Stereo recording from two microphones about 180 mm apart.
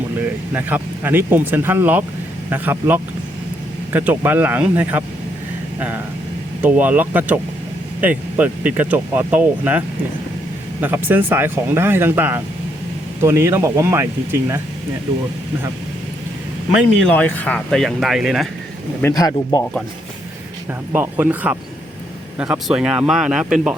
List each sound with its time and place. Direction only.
0.5 s speech: 10° right (ahead or behind)
6.6 s speech: 10° right (ahead or behind)
17.0 s speech: 5° left (ahead or behind)
19.0 s speech: 20° left (ahead or behind)
20.9 s speech: 10° right (ahead or behind)